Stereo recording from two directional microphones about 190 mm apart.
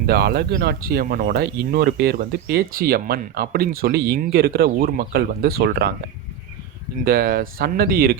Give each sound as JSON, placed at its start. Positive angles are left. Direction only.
{"t": 0.0, "sound": "speech", "side_deg": -55}
{"t": 7.0, "sound": "speech", "side_deg": -50}